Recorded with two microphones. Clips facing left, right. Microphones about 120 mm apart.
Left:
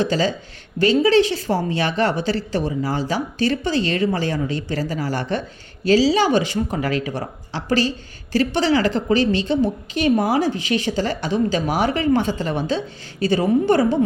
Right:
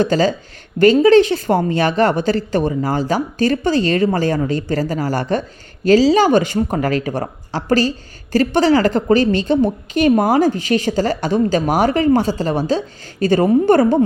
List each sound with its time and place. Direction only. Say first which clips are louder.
0.0 s speech: right 5 dB; 45° right (ahead or behind)